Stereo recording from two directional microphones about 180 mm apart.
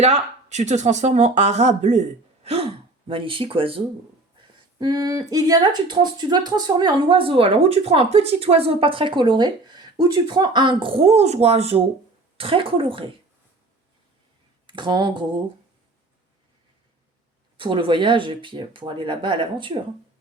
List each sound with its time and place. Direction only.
0.0 s speech: 40° right (ahead or behind)
14.7 s speech: 25° right (ahead or behind)
17.6 s speech: 30° right (ahead or behind)